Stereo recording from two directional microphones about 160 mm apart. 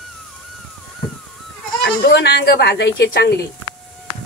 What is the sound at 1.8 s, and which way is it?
Goat, 90° left.